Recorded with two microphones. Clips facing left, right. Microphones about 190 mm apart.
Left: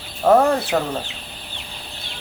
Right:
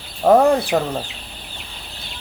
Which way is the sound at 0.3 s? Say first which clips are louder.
Right 2 dB; 15° right (ahead or behind).